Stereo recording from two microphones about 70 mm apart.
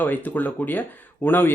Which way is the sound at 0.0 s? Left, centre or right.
Left.